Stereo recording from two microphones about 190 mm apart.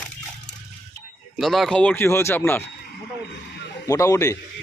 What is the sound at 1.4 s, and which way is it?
Speech, centre (ahead or behind).